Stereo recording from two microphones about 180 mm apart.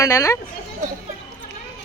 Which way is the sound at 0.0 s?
20° left (ahead or behind).